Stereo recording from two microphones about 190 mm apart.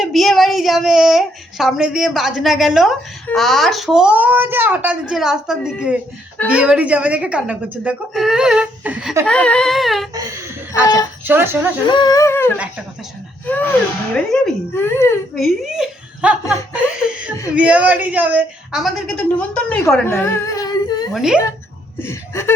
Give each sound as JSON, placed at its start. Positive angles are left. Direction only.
{"t": 0.0, "sound": "a woman's voice", "side_deg": 0}
{"t": 9.2, "sound": "a woman's voice", "side_deg": 5}
{"t": 10.2, "sound": "a woman's voice", "side_deg": -15}
{"t": 10.8, "sound": "speech", "side_deg": 20}
{"t": 11.3, "sound": "a woman's voice", "side_deg": -10}
{"t": 11.9, "sound": "a sound", "side_deg": 20}
{"t": 14.7, "sound": "a sound", "side_deg": 10}
{"t": 15.4, "sound": "a woman's voice", "side_deg": 0}
{"t": 21.1, "sound": "a woman's voice", "side_deg": -5}
{"t": 22.0, "sound": "a sound", "side_deg": 15}